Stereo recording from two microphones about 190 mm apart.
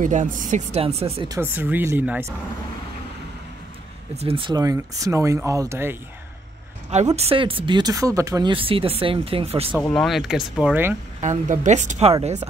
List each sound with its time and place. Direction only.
0.0 s speech: 40° right (ahead or behind)
1.3 s speech: 10° right (ahead or behind)
4.2 s speech: 30° right (ahead or behind); by 5.9 s 15° right (ahead or behind)
7.2 s speech: 30° right (ahead or behind)
9.8 s speech: 5° left (ahead or behind)
11.1 s speech: 40° right (ahead or behind)